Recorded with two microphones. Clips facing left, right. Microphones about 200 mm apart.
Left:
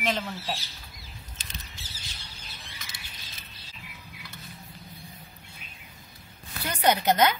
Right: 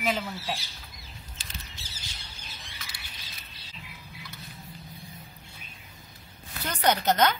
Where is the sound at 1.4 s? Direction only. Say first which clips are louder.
Even; 20° left (ahead or behind).